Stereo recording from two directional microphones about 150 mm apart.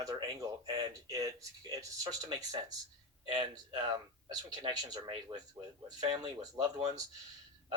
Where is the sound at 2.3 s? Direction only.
25° right (ahead or behind).